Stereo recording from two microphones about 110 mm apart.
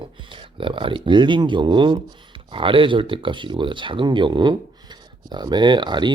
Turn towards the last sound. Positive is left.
turn(degrees=-45)  # may be behind; listen again after turning